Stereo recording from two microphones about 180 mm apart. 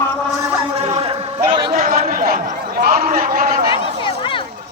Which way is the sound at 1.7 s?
45° right (ahead or behind).